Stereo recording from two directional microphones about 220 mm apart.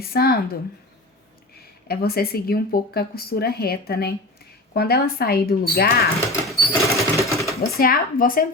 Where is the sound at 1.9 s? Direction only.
45° left (ahead or behind).